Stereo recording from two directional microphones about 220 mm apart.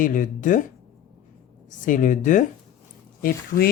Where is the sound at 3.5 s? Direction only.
40° left (ahead or behind).